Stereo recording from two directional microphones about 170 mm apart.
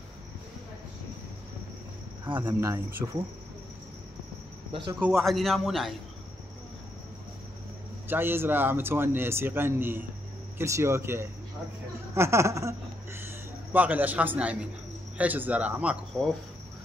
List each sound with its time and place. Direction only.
2.3 s a man's voice: 15° right (ahead or behind)
5.0 s a man's voice: centre (ahead or behind)
8.1 s a man's voice: 15° right (ahead or behind)
12.2 s a sound: 15° right (ahead or behind)
13.7 s a man's voice: 10° right (ahead or behind)